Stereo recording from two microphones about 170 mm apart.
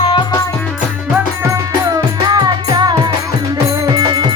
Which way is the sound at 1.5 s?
20° right (ahead or behind).